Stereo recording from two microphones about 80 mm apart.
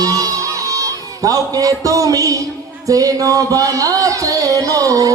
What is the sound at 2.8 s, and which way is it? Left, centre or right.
Speech, right.